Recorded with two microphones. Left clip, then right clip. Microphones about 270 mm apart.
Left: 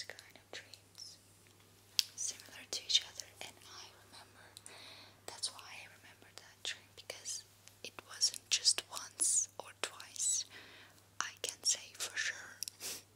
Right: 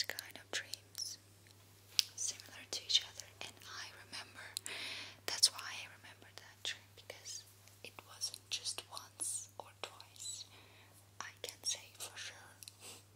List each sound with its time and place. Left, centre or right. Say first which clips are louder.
0.0 s whispering: right 7 dB; centre
2.0 s whispering: even; centre
4.1 s whispering: right 9 dB; right; by 12.6 s centre